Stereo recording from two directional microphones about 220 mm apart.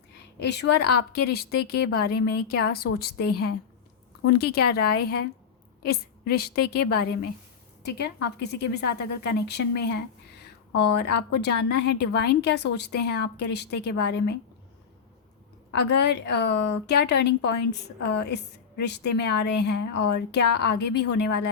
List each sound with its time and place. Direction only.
0.3 s a woman's voice: 50° left (ahead or behind)
15.7 s a woman's voice: 50° left (ahead or behind)